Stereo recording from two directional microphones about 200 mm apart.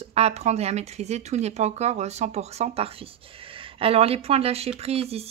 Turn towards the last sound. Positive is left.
turn(degrees=-30)  # may be behind; listen again after turning